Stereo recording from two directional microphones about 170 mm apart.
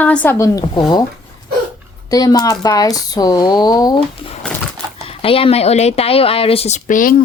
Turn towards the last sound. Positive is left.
turn(degrees=50)  # may be behind; listen again after turning